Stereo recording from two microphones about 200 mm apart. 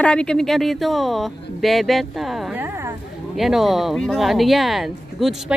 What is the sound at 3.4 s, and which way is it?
Speech, centre (ahead or behind).